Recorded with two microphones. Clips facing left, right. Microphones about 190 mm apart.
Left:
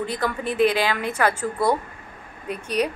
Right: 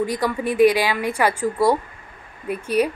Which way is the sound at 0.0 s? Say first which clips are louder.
Right 4 dB; 10° right (ahead or behind).